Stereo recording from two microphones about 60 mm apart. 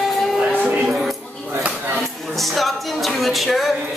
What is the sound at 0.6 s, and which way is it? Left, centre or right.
Music, right.